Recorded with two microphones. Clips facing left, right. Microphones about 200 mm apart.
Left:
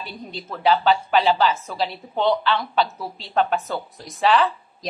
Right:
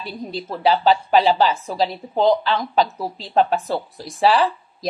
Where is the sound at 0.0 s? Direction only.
35° right (ahead or behind).